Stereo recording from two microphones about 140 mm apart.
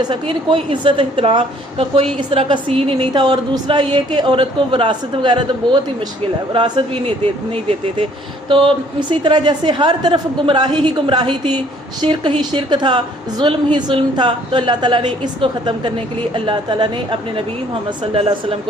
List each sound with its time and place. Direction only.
0.0 s a woman's voice: 35° right (ahead or behind)
3.1 s a woman's voice: 30° right (ahead or behind)